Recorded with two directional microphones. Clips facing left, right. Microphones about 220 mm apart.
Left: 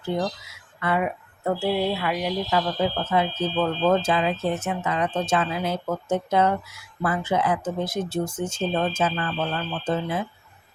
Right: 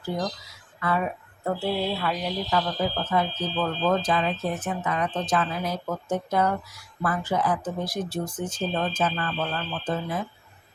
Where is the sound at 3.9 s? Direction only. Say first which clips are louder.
Left 2 dB; 25° left (ahead or behind).